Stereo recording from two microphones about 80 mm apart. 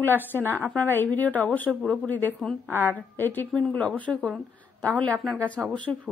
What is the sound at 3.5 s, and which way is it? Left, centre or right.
Speech, centre.